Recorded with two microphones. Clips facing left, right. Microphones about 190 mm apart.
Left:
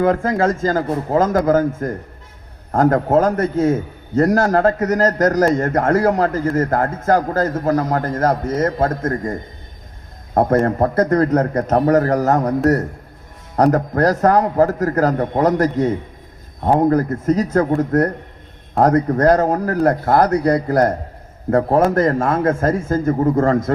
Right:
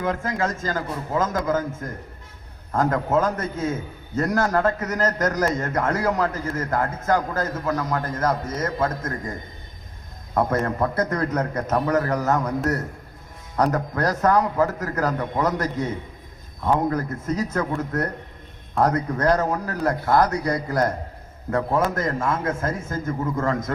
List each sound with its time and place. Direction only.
0.0 s speech: 40° left (ahead or behind)
1.3 s a man's voice: 55° left (ahead or behind)
2.7 s a man's voice: 45° left (ahead or behind)
3.3 s a man's voice: 65° left (ahead or behind)
4.4 s speech: 40° left (ahead or behind)
5.7 s a man's voice: 45° left (ahead or behind)
21.9 s a man's voice: 65° left (ahead or behind)
23.4 s speech: 35° left (ahead or behind)